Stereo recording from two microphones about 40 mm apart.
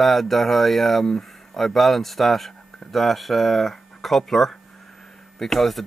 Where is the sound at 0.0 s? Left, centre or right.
Centre.